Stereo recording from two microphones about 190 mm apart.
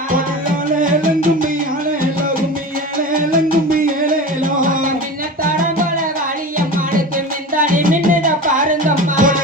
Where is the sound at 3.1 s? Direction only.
50° right (ahead or behind).